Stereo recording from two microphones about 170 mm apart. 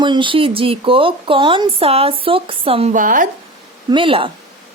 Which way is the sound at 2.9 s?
50° right (ahead or behind).